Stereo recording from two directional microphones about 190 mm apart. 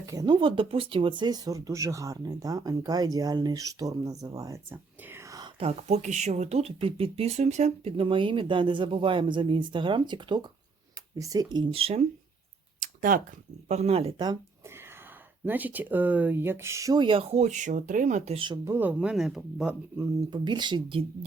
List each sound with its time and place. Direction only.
0.0 s speech: 20° right (ahead or behind)
5.5 s speech: 35° right (ahead or behind)
12.8 s a sound: 45° right (ahead or behind)
13.7 s speech: 35° right (ahead or behind)
15.4 s speech: 10° right (ahead or behind); by 18.6 s 25° right (ahead or behind)
18.6 s speech: 10° right (ahead or behind)
20.0 s speech: 25° right (ahead or behind)